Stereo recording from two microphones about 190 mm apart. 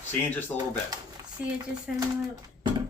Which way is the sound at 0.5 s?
10° left (ahead or behind).